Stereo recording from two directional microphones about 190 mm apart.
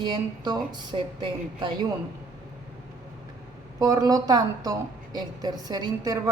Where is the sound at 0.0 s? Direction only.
25° right (ahead or behind).